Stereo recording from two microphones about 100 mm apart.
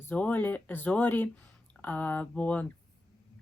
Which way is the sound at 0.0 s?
15° left (ahead or behind).